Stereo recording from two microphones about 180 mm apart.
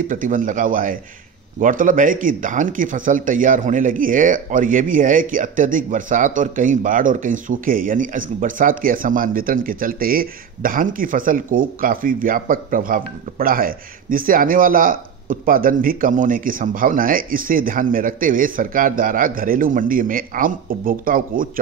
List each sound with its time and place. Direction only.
0.1 s speech: 45° right (ahead or behind)